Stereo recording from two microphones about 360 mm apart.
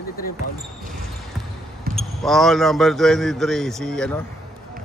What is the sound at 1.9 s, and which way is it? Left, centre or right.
Speech, centre.